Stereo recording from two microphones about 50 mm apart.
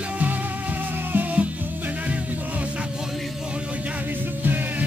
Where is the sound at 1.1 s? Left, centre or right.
Right.